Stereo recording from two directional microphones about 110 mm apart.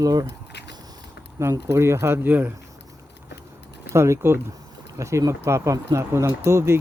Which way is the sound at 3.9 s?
25° right (ahead or behind).